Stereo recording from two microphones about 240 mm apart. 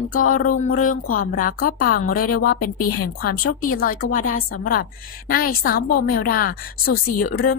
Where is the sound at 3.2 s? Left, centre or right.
Left.